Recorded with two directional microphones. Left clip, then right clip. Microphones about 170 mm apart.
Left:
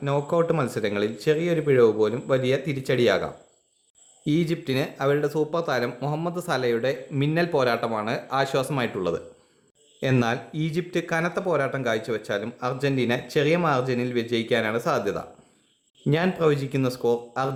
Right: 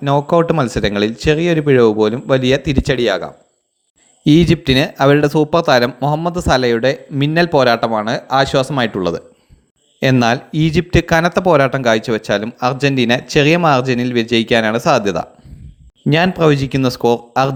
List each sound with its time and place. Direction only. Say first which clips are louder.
0.0 s speech: right 10 dB; 35° right (ahead or behind)